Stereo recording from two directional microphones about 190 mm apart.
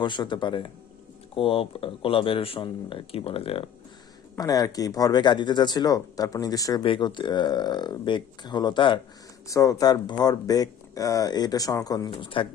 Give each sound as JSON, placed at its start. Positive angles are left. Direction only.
{"t": 0.0, "sound": "speech", "side_deg": 25}
{"t": 4.4, "sound": "speech", "side_deg": 20}